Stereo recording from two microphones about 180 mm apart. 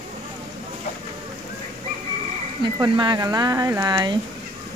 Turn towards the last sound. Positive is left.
turn(degrees=-25)  # may be behind; listen again after turning